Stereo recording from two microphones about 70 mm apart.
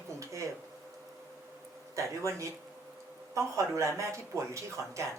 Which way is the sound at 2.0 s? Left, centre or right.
Right.